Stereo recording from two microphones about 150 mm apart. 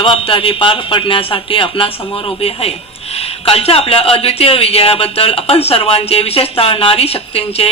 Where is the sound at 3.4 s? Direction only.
40° left (ahead or behind).